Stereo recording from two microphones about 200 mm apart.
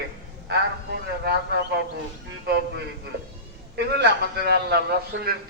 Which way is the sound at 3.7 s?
55° right (ahead or behind).